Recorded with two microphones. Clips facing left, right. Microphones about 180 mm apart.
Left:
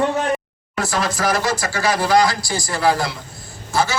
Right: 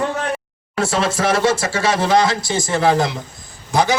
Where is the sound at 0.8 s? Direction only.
25° right (ahead or behind).